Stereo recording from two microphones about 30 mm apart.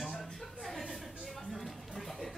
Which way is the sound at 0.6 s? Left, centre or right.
Centre.